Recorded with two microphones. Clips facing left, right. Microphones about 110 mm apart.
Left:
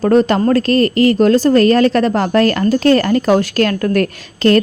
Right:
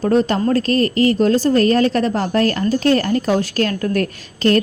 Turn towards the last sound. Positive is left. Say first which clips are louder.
# left 4 dB
turn(degrees=85)